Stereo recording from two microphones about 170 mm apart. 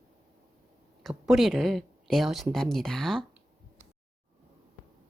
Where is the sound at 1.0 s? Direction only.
Centre (ahead or behind).